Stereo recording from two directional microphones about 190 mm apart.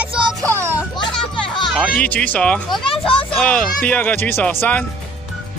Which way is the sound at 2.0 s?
5° left (ahead or behind).